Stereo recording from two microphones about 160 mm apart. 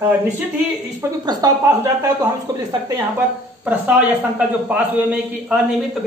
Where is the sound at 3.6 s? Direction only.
10° right (ahead or behind).